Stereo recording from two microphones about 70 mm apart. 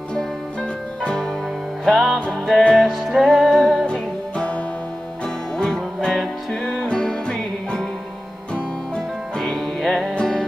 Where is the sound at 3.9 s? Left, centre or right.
Centre.